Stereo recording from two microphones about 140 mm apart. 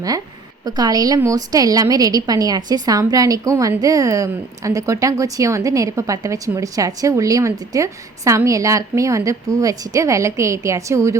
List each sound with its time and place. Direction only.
0.6 s a woman's voice: 30° right (ahead or behind)